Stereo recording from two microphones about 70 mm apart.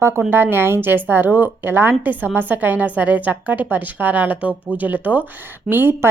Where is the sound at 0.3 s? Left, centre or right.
Right.